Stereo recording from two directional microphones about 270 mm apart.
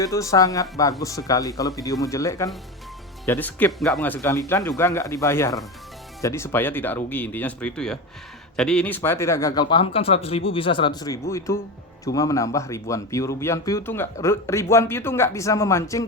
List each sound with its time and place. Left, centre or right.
0.0 s speech: centre